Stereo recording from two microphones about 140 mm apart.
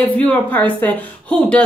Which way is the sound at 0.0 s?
10° left (ahead or behind).